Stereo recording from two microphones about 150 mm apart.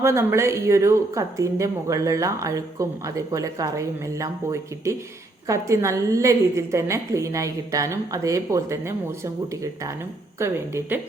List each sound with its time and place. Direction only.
0.0 s a woman's voice: 20° right (ahead or behind)